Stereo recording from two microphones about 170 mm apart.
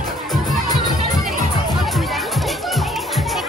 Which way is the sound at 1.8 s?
Centre (ahead or behind).